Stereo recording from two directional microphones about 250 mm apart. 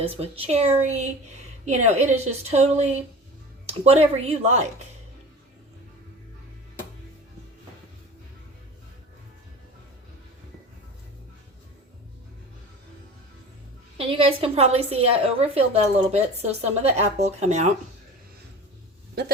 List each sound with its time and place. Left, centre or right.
0.0 s a woman's voice: right
14.0 s a woman's voice: right